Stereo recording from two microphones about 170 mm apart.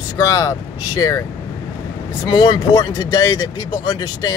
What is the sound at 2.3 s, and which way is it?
Speech, 25° left (ahead or behind).